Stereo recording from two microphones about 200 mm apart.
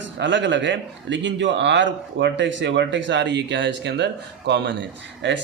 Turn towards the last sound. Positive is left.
turn(degrees=-65)  # may be behind; listen again after turning